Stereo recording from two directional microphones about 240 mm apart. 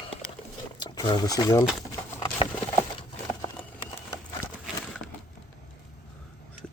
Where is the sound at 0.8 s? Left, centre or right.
Centre.